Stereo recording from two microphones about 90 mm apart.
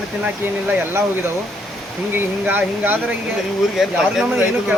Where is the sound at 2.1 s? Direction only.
20° right (ahead or behind).